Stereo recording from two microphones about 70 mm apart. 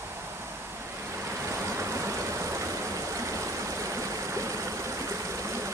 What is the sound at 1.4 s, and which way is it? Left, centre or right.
Vehicle, right.